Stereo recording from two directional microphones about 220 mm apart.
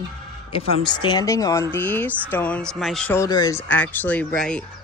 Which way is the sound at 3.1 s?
15° left (ahead or behind).